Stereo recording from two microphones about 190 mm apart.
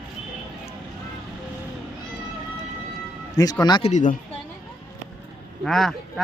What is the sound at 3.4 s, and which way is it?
Speech, 20° left (ahead or behind).